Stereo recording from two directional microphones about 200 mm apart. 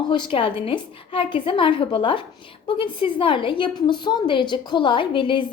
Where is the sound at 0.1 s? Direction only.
25° left (ahead or behind).